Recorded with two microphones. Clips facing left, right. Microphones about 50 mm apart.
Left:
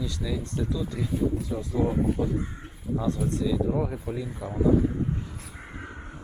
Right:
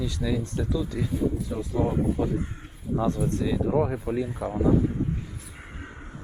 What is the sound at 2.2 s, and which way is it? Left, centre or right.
Speech, centre.